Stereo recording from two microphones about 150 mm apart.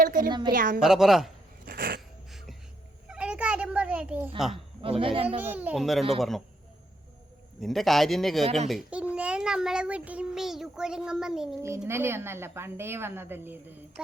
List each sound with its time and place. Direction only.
0.2 s a woman's voice: 30° right (ahead or behind)
0.5 s a woman's voice: 65° right (ahead or behind)
0.8 s child singing: 5° right (ahead or behind)
1.6 s a sound: 90° right
3.1 s a sound: 5° right (ahead or behind)
4.5 s a man's voice: 35° right (ahead or behind)
5.4 s a woman's voice: 10° right (ahead or behind)
5.8 s child singing: centre (ahead or behind)
7.6 s child singing: centre (ahead or behind)
11.9 s a woman's voice: 15° right (ahead or behind)